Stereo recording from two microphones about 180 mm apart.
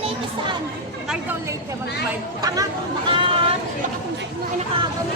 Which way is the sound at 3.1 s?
30° right (ahead or behind).